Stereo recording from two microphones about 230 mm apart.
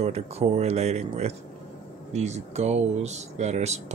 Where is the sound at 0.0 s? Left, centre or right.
Right.